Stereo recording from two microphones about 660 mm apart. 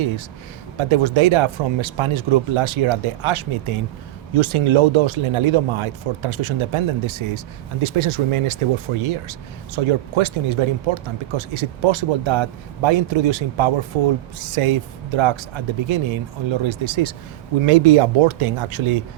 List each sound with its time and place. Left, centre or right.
0.8 s speech: right